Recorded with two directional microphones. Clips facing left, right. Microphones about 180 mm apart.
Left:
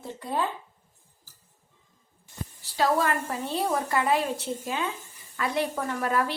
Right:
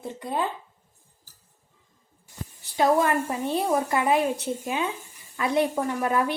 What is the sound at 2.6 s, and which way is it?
Speech, 20° right (ahead or behind).